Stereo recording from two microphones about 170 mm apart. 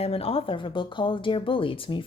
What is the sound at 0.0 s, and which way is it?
Speech, 35° left (ahead or behind).